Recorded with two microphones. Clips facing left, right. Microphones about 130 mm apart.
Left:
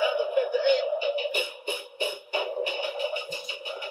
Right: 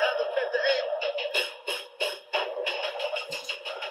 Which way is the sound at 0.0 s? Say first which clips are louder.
Left 2 dB; 15° left (ahead or behind).